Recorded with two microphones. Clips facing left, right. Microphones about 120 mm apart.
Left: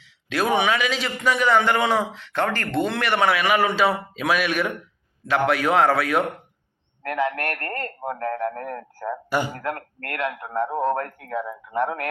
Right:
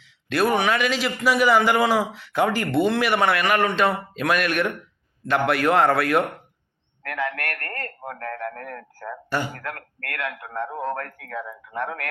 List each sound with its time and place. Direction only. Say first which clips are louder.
0.0 s a man's voice: right 2 dB; centre (ahead or behind)
7.0 s a man's voice: left 4 dB; 25° left (ahead or behind)